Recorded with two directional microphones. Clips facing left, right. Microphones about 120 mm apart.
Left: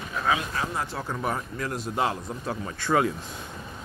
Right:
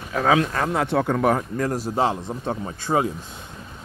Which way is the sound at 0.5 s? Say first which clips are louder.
Right 9 dB; 65° right (ahead or behind).